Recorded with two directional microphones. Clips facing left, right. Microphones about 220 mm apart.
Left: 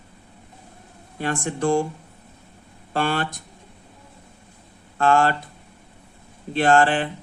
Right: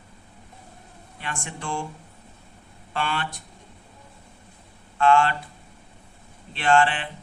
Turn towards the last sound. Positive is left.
turn(degrees=45)  # may be behind; listen again after turning